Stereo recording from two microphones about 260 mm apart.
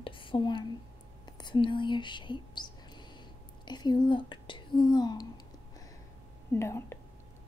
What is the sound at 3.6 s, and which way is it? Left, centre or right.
Speech, centre.